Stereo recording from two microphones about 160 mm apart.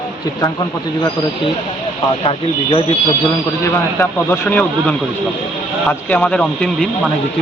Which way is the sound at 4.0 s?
10° left (ahead or behind).